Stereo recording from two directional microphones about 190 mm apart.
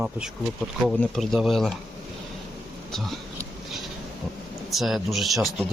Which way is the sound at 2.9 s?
Centre (ahead or behind).